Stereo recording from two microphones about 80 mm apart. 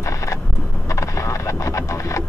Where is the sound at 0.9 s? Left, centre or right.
Left.